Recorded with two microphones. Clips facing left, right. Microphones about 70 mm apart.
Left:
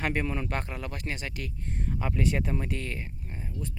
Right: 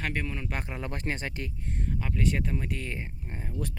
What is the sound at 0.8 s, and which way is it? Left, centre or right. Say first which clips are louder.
Speech: right 2 dB; right.